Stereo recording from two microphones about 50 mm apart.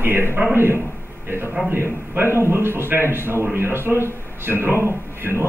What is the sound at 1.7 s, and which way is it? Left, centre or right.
A man's voice, right.